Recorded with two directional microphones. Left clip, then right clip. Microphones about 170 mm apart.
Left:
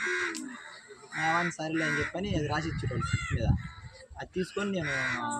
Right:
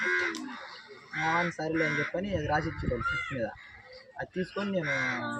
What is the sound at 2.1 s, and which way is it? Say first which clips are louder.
Speech: right 2 dB; centre (ahead or behind).